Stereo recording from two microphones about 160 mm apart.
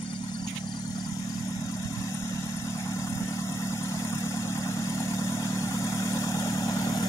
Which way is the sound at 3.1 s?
20° left (ahead or behind).